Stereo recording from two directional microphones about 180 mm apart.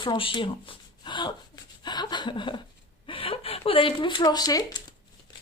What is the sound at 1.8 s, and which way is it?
Chuckle, 25° left (ahead or behind).